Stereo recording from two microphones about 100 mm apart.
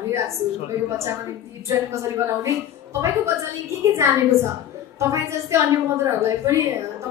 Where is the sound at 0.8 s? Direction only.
30° right (ahead or behind).